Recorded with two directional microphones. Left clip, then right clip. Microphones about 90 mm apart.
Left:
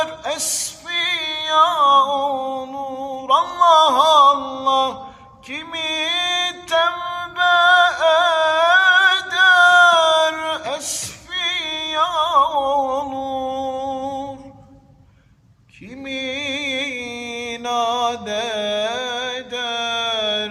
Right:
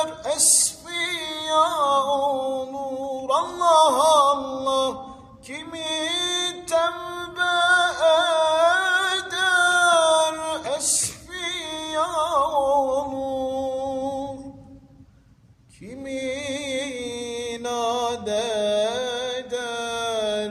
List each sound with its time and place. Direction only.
0.0 s music: 35° right (ahead or behind)
0.9 s a sound: 40° right (ahead or behind)
5.5 s music: 35° right (ahead or behind)
16.0 s music: 40° right (ahead or behind)